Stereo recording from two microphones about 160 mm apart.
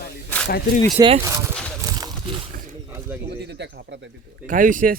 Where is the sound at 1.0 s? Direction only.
20° right (ahead or behind).